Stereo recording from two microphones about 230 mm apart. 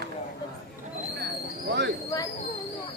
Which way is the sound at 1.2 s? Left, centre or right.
Right.